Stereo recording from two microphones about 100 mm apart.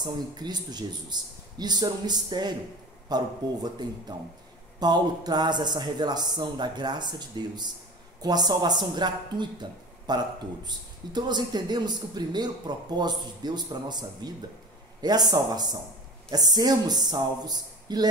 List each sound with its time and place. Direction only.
0.0 s speech: 45° right (ahead or behind)